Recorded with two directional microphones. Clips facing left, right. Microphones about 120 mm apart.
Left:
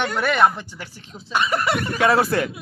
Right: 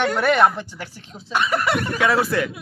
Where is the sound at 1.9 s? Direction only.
45° left (ahead or behind).